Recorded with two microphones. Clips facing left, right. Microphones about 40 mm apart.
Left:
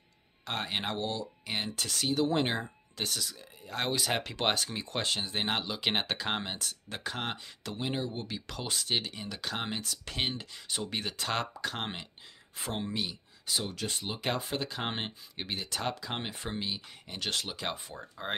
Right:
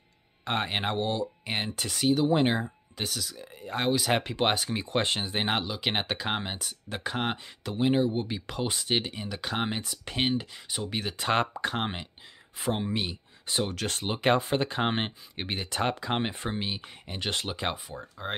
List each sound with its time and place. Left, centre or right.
0.5 s speech: right
1.8 s speech: centre
5.7 s speech: centre
11.1 s speech: right
13.0 s speech: right
13.7 s speech: right
14.0 s speech: right
18.2 s speech: centre